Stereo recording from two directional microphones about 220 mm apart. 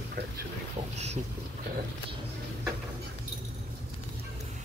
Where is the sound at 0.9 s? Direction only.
30° right (ahead or behind).